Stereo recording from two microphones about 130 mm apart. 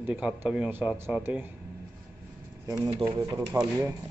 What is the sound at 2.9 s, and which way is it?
Speech, 45° right (ahead or behind).